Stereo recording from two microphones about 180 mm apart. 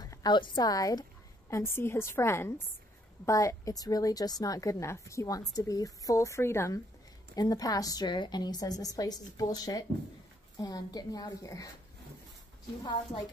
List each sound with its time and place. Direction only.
0.0 s a woman's voice: 20° left (ahead or behind)